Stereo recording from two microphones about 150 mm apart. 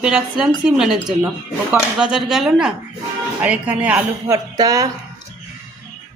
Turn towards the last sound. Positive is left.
turn(degrees=-25)  # may be behind; listen again after turning